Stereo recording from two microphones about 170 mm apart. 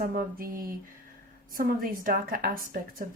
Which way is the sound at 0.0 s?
55° right (ahead or behind).